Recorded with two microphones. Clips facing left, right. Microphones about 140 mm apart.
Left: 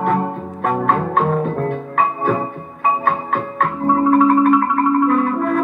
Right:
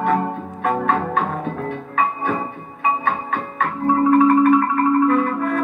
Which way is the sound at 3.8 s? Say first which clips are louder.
Left 1 dB; 50° left (ahead or behind).